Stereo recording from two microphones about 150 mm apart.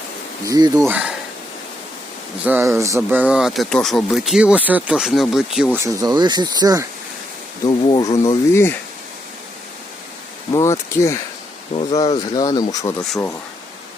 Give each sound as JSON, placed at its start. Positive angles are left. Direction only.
{"t": 0.4, "sound": "speech", "side_deg": -25}
{"t": 0.9, "sound": "speech", "side_deg": -10}
{"t": 2.4, "sound": "speech", "side_deg": -15}
{"t": 5.7, "sound": "speech", "side_deg": -20}
{"t": 7.9, "sound": "speech", "side_deg": 30}
{"t": 10.5, "sound": "speech", "side_deg": 20}